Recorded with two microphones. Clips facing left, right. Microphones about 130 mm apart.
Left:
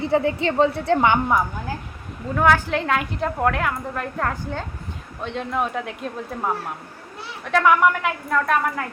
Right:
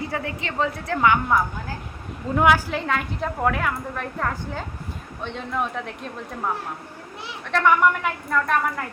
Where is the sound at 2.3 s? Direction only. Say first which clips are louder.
Even; 15° right (ahead or behind).